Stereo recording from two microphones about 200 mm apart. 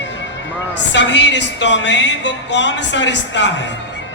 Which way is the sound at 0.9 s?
65° left (ahead or behind).